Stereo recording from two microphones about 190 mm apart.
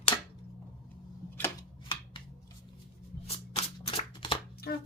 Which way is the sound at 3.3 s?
30° left (ahead or behind).